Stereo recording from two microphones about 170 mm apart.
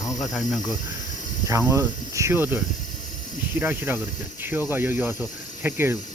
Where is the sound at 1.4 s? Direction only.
20° right (ahead or behind).